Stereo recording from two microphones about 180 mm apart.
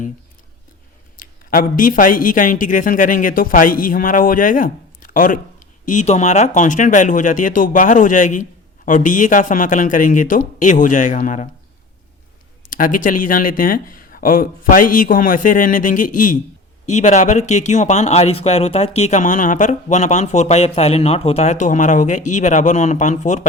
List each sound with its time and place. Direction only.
1.1 s speech: 50° left (ahead or behind)
12.7 s speech: 50° left (ahead or behind)